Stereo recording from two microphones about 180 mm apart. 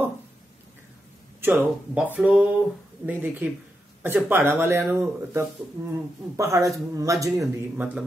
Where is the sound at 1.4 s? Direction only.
10° right (ahead or behind).